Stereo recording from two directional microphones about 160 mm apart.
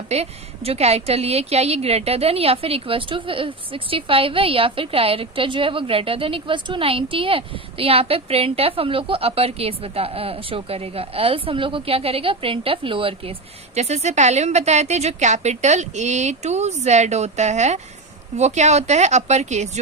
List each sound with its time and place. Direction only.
0.1 s a woman's voice: 40° right (ahead or behind)